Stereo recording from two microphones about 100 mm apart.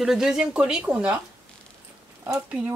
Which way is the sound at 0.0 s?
5° right (ahead or behind).